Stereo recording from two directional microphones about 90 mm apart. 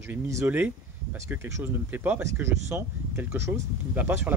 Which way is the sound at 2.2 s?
30° right (ahead or behind).